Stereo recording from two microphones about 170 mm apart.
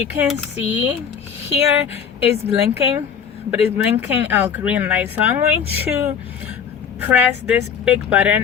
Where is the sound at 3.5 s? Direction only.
10° right (ahead or behind).